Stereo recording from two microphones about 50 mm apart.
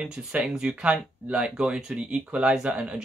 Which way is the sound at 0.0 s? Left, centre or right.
Right.